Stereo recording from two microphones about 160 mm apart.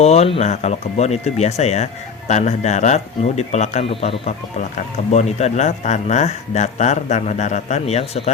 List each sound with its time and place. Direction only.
0.0 s speech: 40° left (ahead or behind)